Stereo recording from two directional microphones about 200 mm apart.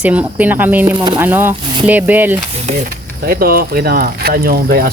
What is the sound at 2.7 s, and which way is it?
Speech, 45° right (ahead or behind).